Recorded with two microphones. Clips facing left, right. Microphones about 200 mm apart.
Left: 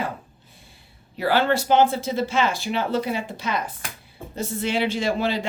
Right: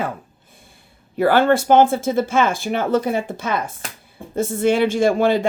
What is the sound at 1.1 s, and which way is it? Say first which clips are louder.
Speech: right 6 dB; 50° right (ahead or behind).